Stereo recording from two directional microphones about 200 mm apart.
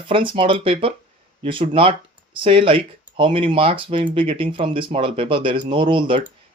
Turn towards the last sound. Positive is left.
turn(degrees=-25)  # may be behind; listen again after turning